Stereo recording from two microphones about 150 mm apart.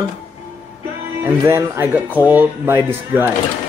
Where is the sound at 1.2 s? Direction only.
20° right (ahead or behind).